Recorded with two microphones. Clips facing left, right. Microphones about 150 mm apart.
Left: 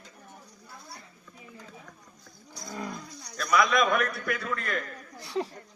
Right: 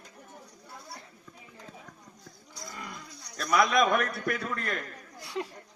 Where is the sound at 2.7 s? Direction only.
40° left (ahead or behind).